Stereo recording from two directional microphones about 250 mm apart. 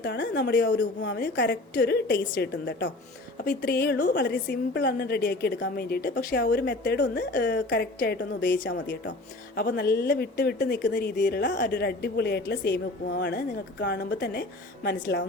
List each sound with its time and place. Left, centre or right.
0.0 s a woman's voice: left
3.4 s a woman's voice: left